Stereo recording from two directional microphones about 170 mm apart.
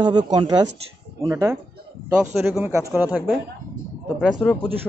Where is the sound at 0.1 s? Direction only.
25° right (ahead or behind).